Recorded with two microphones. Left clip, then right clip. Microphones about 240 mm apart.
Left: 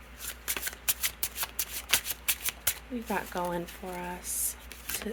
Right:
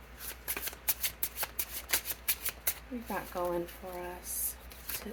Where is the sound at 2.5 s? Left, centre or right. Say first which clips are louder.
Left 5 dB; left.